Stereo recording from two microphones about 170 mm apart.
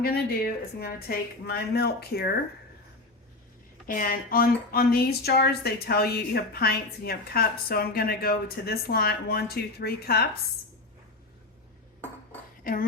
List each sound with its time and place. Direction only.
0.0 s speech: 60° left (ahead or behind)
3.8 s speech: 55° left (ahead or behind)
12.7 s a woman's voice: 55° left (ahead or behind)